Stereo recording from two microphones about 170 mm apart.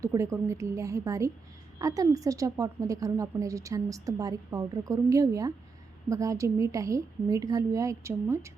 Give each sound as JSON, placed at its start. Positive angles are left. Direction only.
{"t": 0.0, "sound": "a woman's voice", "side_deg": -15}